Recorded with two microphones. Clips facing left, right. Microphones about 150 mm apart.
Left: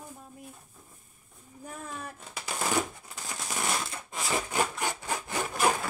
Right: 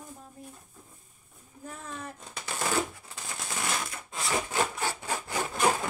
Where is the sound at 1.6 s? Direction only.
10° left (ahead or behind).